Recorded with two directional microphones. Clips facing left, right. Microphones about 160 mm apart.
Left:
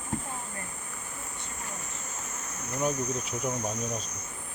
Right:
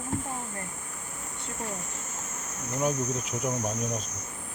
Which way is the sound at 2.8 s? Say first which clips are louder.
Right 1 dB; 5° right (ahead or behind).